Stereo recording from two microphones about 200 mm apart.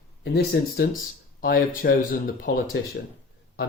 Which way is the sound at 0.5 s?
50° left (ahead or behind).